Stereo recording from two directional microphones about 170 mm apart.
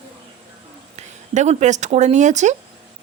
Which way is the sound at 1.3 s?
45° right (ahead or behind).